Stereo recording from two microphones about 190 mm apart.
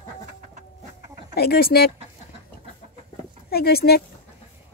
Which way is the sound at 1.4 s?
55° left (ahead or behind).